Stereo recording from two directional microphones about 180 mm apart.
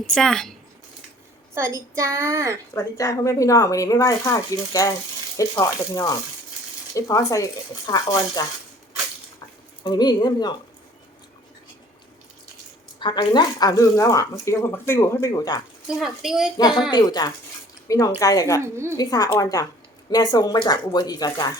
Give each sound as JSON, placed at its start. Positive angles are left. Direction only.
{"t": 0.1, "sound": "speech", "side_deg": 5}
{"t": 1.5, "sound": "a woman's voice", "side_deg": -15}
{"t": 2.7, "sound": "a woman's voice", "side_deg": 20}
{"t": 9.8, "sound": "speech", "side_deg": 25}
{"t": 13.0, "sound": "a woman's voice", "side_deg": 25}
{"t": 15.9, "sound": "speech", "side_deg": 0}
{"t": 16.9, "sound": "speech", "side_deg": 20}